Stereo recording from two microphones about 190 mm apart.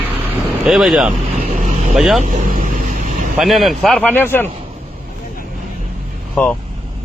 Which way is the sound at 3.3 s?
Centre (ahead or behind).